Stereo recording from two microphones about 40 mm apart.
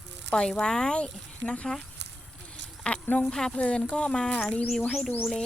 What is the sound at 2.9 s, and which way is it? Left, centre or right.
Speech, left.